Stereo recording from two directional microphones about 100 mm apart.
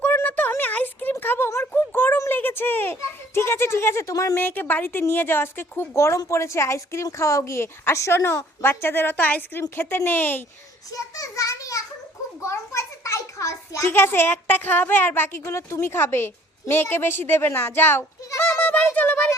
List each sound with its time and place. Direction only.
0.0 s a sound: 15° left (ahead or behind); by 4.4 s 35° left (ahead or behind)
4.4 s a woman's voice: 20° left (ahead or behind)
10.9 s a child's voice: 35° left (ahead or behind)
18.3 s goat: 25° left (ahead or behind)
18.9 s speech: 20° left (ahead or behind)